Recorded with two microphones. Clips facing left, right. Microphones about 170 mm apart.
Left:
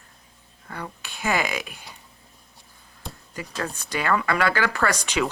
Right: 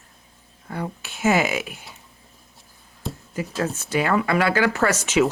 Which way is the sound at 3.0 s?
Centre (ahead or behind).